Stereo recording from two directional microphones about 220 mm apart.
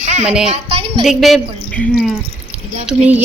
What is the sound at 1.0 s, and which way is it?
Speech, centre (ahead or behind).